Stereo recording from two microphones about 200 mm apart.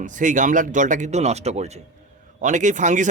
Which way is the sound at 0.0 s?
40° right (ahead or behind).